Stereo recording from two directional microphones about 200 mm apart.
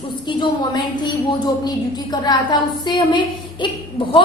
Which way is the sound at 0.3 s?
25° left (ahead or behind).